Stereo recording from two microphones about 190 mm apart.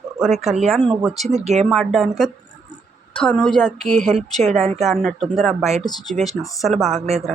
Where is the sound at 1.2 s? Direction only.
35° right (ahead or behind).